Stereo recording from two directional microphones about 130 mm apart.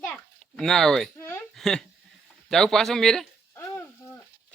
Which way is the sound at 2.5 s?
5° left (ahead or behind).